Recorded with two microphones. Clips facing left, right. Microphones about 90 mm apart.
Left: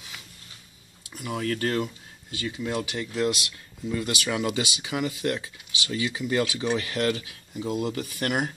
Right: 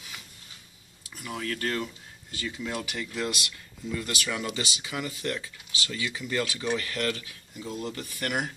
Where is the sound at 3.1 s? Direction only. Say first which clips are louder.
Left 7 dB; 10° left (ahead or behind).